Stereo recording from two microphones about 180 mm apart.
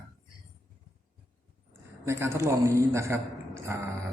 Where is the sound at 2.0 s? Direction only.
15° right (ahead or behind).